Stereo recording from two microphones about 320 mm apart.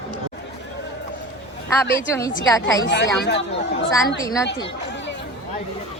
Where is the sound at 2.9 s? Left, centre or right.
Left.